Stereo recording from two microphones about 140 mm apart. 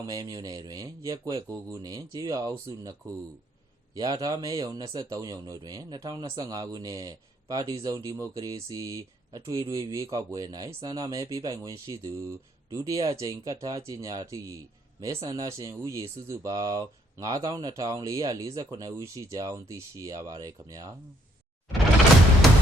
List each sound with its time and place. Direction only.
0.0 s speech: 25° right (ahead or behind)
3.9 s speech: 25° right (ahead or behind)